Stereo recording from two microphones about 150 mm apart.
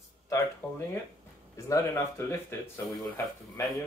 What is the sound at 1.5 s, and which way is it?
Speech, 20° left (ahead or behind).